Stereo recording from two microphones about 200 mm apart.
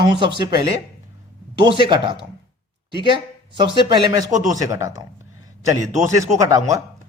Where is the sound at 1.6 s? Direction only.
25° right (ahead or behind).